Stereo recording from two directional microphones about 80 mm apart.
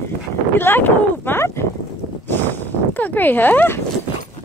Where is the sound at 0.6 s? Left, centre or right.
Left.